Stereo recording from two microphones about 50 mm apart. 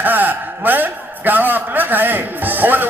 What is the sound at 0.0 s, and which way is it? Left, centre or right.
A man's voice, right.